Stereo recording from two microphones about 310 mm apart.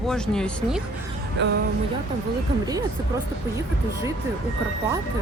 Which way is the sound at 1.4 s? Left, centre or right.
Right.